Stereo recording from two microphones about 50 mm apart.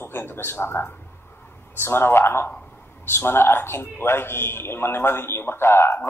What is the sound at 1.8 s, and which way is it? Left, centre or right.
A man's voice, left.